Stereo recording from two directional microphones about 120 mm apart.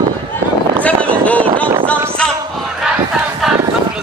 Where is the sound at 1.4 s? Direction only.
45° right (ahead or behind).